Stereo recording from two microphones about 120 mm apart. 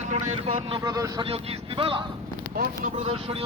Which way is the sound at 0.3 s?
50° right (ahead or behind).